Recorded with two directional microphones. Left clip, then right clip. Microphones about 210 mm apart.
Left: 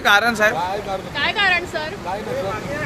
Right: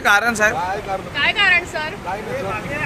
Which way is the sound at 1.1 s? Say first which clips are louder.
Right 3 dB; 25° left (ahead or behind).